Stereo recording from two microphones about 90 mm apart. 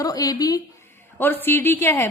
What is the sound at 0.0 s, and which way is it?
Speech, 45° left (ahead or behind).